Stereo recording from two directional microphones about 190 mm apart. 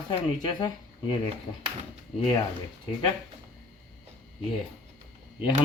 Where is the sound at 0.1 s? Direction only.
25° left (ahead or behind).